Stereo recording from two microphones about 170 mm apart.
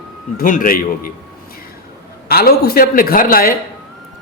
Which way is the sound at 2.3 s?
65° left (ahead or behind).